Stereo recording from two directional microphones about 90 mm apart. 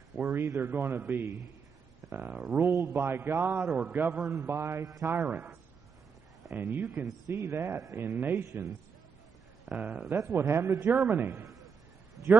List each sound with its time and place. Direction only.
0.2 s a man's voice: 30° right (ahead or behind)
2.7 s a man's voice: 30° right (ahead or behind)
3.6 s speech: 10° right (ahead or behind)
4.3 s a man's voice: 30° right (ahead or behind)
5.0 s a man's voice: 25° right (ahead or behind)
7.2 s a man's voice: 40° right (ahead or behind)
7.5 s a man's voice: 30° right (ahead or behind)
9.7 s speech: 15° right (ahead or behind)
10.1 s a man's voice: 30° right (ahead or behind)